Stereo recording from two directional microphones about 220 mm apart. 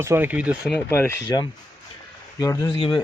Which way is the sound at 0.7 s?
10° left (ahead or behind).